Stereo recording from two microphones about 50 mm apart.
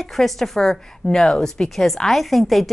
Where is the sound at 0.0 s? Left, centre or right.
Centre.